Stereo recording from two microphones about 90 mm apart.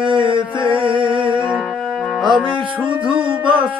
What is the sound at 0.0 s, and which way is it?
Mantra, 70° right (ahead or behind).